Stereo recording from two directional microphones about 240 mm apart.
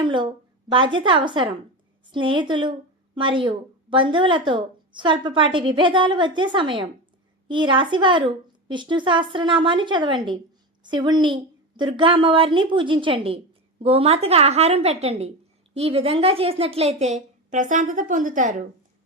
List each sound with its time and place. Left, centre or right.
0.0 s a woman's voice: centre